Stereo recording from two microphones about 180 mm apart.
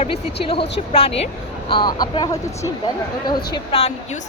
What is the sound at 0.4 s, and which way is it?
Speech, 30° left (ahead or behind).